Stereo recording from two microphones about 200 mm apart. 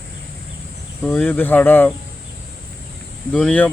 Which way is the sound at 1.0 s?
10° left (ahead or behind).